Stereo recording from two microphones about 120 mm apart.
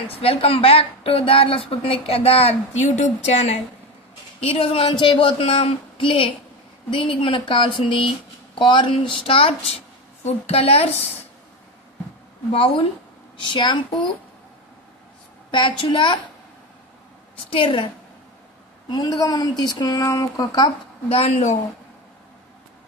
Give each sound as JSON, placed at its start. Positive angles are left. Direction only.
{"t": 0.2, "sound": "speech", "side_deg": 50}
{"t": 4.4, "sound": "speech", "side_deg": 55}
{"t": 5.4, "sound": "speech", "side_deg": 55}
{"t": 10.2, "sound": "a woman's voice", "side_deg": 60}
{"t": 12.5, "sound": "speech", "side_deg": 50}
{"t": 15.5, "sound": "speech", "side_deg": 45}
{"t": 17.5, "sound": "speech", "side_deg": 45}
{"t": 18.9, "sound": "speech", "side_deg": 35}
{"t": 21.1, "sound": "a woman's voice", "side_deg": 60}